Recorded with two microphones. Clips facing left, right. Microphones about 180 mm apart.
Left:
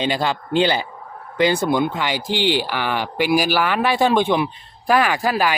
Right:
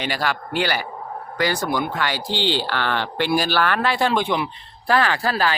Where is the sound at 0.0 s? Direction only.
20° left (ahead or behind).